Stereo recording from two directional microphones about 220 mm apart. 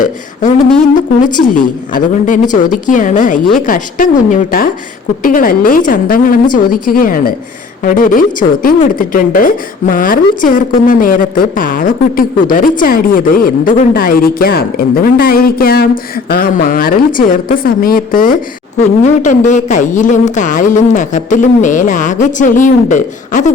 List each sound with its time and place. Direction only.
1.5 s a woman's voice: 35° left (ahead or behind)